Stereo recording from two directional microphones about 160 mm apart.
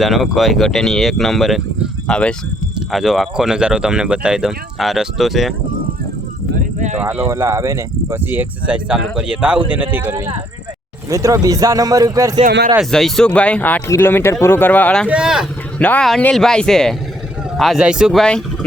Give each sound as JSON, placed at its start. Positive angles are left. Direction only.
{"t": 0.0, "sound": "speech", "side_deg": 0}
{"t": 6.6, "sound": "a sound", "side_deg": -50}
{"t": 7.0, "sound": "speech", "side_deg": -10}
{"t": 12.5, "sound": "speech", "side_deg": -70}
{"t": 12.8, "sound": "speech", "side_deg": 0}
{"t": 15.1, "sound": "speech", "side_deg": -5}
{"t": 15.8, "sound": "speech", "side_deg": 5}